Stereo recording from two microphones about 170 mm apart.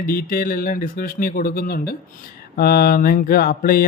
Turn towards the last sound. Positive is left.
turn(degrees=60)  # may be behind; listen again after turning